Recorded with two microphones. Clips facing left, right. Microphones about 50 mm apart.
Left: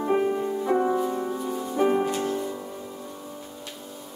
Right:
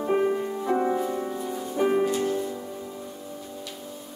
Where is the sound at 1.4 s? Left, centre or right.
Centre.